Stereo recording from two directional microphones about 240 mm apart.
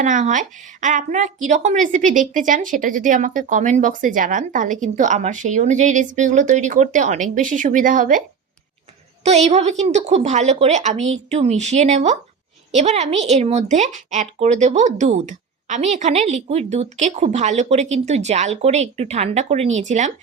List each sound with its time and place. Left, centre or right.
0.0 s a woman's voice: right
9.2 s a woman's voice: right